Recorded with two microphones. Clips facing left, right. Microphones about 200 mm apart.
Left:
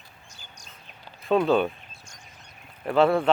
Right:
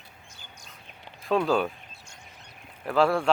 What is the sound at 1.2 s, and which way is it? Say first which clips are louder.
Speech: left 3 dB; centre (ahead or behind).